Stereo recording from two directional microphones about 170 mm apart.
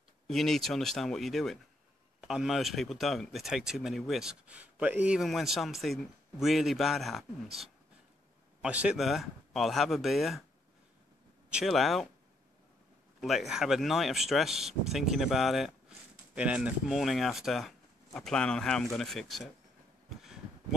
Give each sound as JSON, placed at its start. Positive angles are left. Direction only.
{"t": 0.3, "sound": "speech", "side_deg": 0}
{"t": 11.5, "sound": "speech", "side_deg": 0}
{"t": 13.2, "sound": "speech", "side_deg": 0}